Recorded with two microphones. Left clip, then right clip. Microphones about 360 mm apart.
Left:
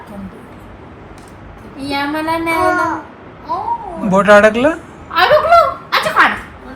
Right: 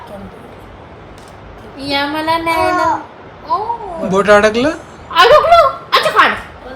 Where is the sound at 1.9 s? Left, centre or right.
Right.